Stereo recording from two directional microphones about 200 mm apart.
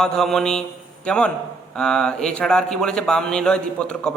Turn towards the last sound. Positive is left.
turn(degrees=5)  # may be behind; listen again after turning